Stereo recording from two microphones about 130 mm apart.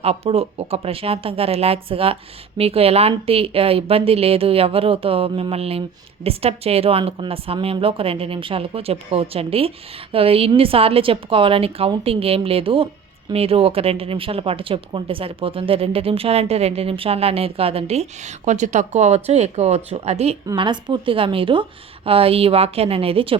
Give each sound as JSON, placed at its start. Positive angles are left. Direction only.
{"t": 0.0, "sound": "speech", "side_deg": -50}
{"t": 20.6, "sound": "speech", "side_deg": -35}